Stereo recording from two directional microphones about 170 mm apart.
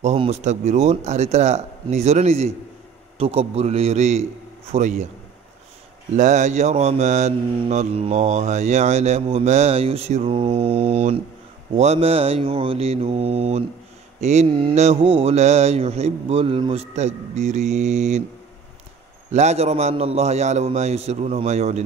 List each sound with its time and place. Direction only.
0.0 s mantra: 35° right (ahead or behind)
6.1 s mantra: 45° right (ahead or behind)
19.3 s mantra: 40° right (ahead or behind)